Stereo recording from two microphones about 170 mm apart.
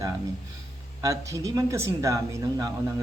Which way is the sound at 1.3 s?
20° right (ahead or behind).